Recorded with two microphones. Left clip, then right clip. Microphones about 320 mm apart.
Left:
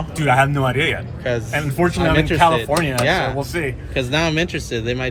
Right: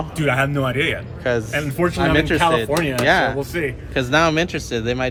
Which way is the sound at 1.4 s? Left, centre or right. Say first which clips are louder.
Even; right.